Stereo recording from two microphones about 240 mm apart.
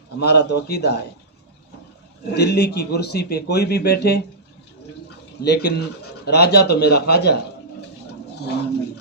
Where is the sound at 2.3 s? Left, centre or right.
Left.